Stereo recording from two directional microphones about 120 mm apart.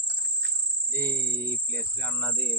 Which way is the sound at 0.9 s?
20° left (ahead or behind).